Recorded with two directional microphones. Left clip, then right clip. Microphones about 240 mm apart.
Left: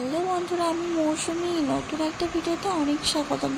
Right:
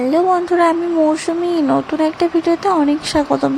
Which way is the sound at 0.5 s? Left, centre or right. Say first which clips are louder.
Right 12 dB; right.